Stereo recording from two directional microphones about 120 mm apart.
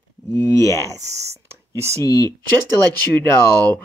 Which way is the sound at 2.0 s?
30° left (ahead or behind).